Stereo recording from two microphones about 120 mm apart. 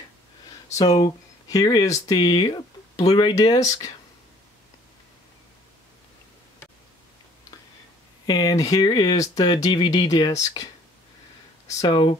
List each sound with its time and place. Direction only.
0.7 s speech: 30° left (ahead or behind)
8.3 s speech: 35° left (ahead or behind)
11.8 s speech: 40° left (ahead or behind)